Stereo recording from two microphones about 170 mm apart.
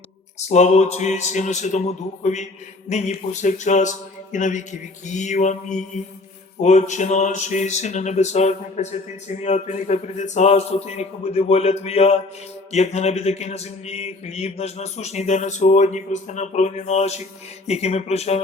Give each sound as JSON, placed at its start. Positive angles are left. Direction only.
{"t": 0.3, "sound": "a man's voice", "side_deg": 40}